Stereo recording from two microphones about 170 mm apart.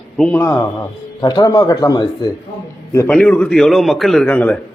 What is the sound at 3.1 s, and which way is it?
A man's voice, 5° left (ahead or behind).